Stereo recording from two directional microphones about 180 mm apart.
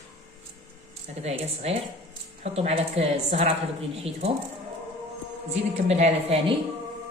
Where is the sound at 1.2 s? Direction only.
35° right (ahead or behind).